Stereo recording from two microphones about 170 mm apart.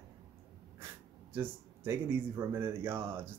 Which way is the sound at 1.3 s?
15° right (ahead or behind).